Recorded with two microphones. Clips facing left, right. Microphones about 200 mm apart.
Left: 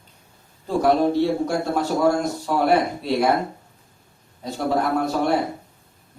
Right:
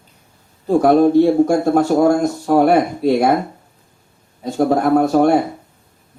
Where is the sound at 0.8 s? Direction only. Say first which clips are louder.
Right 7 dB; 50° right (ahead or behind).